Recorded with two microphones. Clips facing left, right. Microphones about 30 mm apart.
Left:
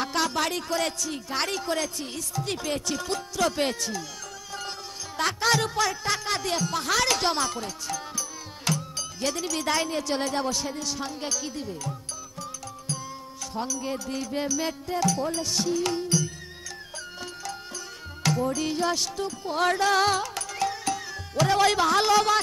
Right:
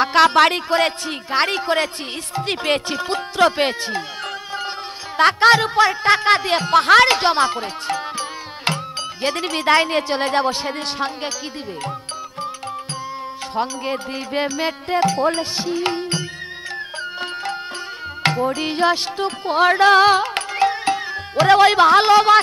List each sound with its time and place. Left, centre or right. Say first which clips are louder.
0.0 s speech: right 13 dB; right
0.6 s speech: right 9 dB; right
4.6 s music: right 8 dB; right
5.6 s speech: right 10 dB; right
7.2 s music: right 9 dB; right
13.6 s speech: right 8 dB; right
15.5 s music: right 4 dB; right
18.2 s speech: right 6 dB; right
19.2 s music: right 10 dB; right
21.5 s speech: right 10 dB; right